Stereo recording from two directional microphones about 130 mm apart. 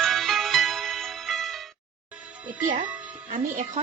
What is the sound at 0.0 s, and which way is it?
Music, centre (ahead or behind).